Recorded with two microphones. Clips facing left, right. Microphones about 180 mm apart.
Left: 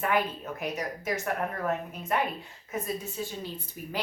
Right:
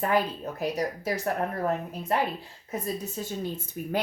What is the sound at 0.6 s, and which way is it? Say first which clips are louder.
A woman's voice: right 5 dB; 35° right (ahead or behind).